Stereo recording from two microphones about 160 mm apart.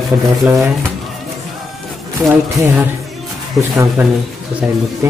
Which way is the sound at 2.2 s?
10° right (ahead or behind).